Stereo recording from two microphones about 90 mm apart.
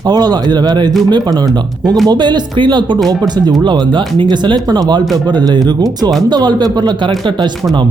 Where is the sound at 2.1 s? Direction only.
55° right (ahead or behind).